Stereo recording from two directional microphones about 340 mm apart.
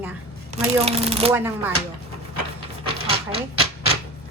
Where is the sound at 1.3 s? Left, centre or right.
Centre.